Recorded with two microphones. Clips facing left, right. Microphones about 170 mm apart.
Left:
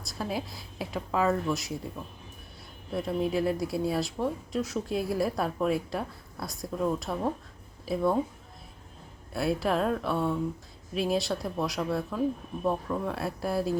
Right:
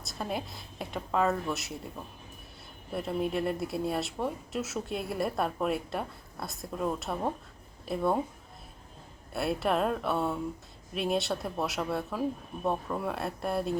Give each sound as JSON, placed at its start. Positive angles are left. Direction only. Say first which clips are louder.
{"t": 0.0, "sound": "speech", "louder": "left 2 dB", "side_deg": 0}
{"t": 2.9, "sound": "speech", "louder": "left 2 dB", "side_deg": 0}
{"t": 9.3, "sound": "speech", "louder": "left 1 dB", "side_deg": 0}